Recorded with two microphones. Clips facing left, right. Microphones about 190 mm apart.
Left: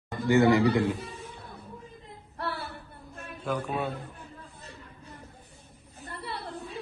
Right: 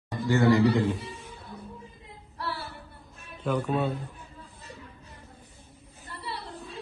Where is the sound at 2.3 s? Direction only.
60° left (ahead or behind).